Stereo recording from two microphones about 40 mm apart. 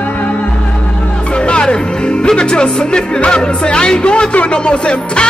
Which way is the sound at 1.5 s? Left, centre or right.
Left.